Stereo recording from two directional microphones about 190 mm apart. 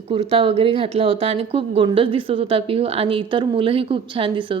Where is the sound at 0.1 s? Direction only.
30° right (ahead or behind).